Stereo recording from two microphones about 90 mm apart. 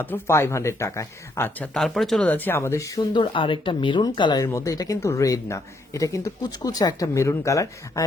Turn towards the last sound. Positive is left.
turn(degrees=35)  # may be behind; listen again after turning